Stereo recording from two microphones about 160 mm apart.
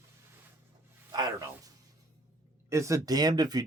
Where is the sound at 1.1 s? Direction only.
25° right (ahead or behind).